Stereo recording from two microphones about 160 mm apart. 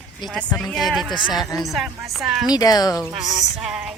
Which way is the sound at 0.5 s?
Centre (ahead or behind).